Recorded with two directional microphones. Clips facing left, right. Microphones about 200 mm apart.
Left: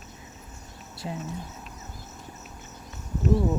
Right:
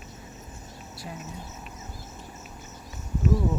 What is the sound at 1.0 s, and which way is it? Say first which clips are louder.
Speech: left 6 dB; 25° left (ahead or behind).